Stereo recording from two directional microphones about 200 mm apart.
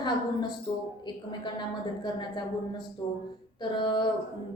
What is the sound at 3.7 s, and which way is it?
Speech, 25° left (ahead or behind).